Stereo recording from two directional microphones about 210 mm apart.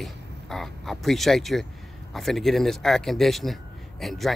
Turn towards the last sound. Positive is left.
turn(degrees=0)  # may be behind; listen again after turning